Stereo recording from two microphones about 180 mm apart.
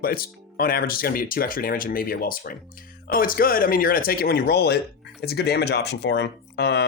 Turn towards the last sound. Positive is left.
turn(degrees=70)  # may be behind; listen again after turning